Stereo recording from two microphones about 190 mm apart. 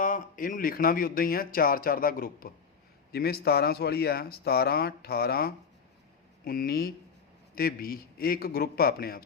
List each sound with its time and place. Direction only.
0.0 s speech: 45° left (ahead or behind)